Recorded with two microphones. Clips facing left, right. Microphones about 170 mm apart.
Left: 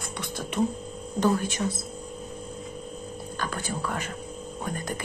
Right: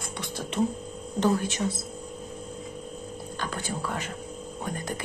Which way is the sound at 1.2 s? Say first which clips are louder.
Even; 25° right (ahead or behind).